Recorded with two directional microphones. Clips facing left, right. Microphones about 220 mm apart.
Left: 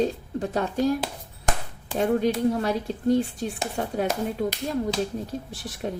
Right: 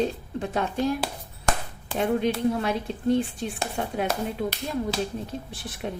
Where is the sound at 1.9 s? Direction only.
40° left (ahead or behind).